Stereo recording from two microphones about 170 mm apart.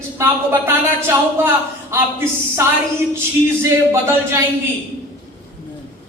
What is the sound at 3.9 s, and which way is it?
Speech, 15° right (ahead or behind).